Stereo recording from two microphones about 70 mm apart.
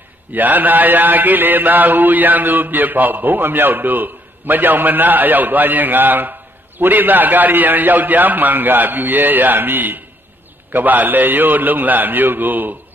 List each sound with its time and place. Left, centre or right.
0.3 s mantra: right